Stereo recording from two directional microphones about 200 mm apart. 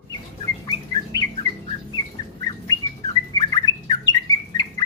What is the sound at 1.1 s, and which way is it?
Bird, 20° left (ahead or behind).